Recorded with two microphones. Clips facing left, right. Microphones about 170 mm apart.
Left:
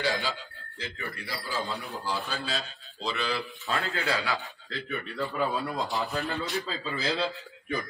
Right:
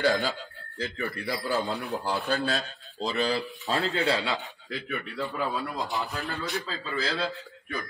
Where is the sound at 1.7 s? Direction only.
70° right (ahead or behind).